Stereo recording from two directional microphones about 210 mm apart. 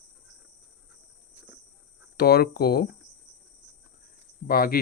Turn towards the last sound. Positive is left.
turn(degrees=45)  # may be behind; listen again after turning